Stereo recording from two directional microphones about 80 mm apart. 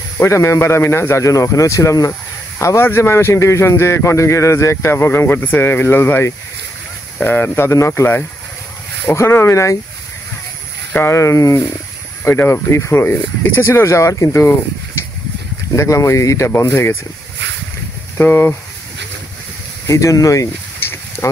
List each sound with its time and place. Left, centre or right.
0.2 s speech: left
2.6 s speech: left
10.9 s speech: left
11.1 s speech: left
12.3 s speech: left
15.7 s speech: left
18.1 s speech: left
19.9 s speech: left
20.8 s a sound: left